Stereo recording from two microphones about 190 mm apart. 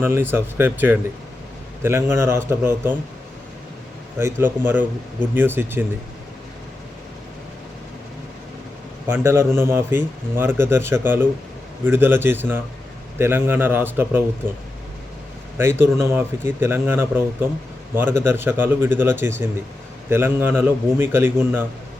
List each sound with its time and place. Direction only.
0.0 s speech: 10° right (ahead or behind)
4.2 s speech: 10° right (ahead or behind)
9.0 s speech: 15° right (ahead or behind)
15.8 s speech: 15° right (ahead or behind)